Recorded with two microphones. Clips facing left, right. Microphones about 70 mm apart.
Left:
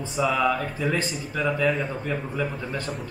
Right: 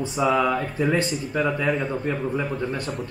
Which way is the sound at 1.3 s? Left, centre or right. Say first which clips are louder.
Even; centre.